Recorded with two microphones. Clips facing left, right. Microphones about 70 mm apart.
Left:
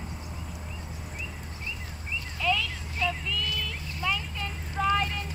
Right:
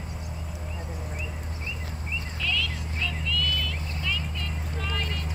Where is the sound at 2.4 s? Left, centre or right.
Left.